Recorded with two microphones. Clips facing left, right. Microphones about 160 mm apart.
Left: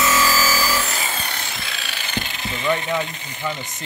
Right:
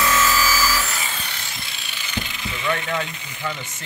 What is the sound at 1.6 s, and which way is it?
Ratchet, 90° left.